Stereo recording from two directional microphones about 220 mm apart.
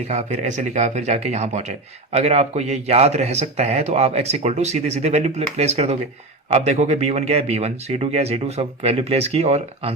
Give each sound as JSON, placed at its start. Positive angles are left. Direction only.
{"t": 0.1, "sound": "a man's voice", "side_deg": -30}